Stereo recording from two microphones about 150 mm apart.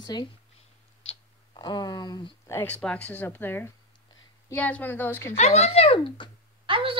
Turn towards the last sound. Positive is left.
turn(degrees=-35)  # may be behind; listen again after turning